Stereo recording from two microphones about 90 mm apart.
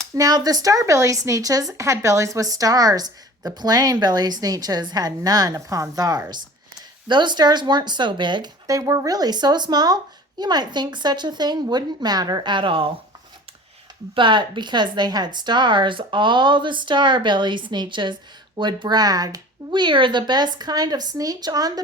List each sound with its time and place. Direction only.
0.1 s speech: 45° right (ahead or behind)
7.1 s speech: 55° right (ahead or behind)
8.6 s speech: 35° right (ahead or behind); by 12.9 s 80° right
14.2 s speech: 65° right (ahead or behind); by 21.7 s 45° right (ahead or behind)